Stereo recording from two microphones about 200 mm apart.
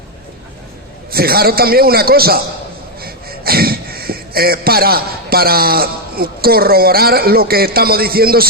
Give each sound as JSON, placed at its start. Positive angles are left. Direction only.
{"t": 1.1, "sound": "a man's voice", "side_deg": -50}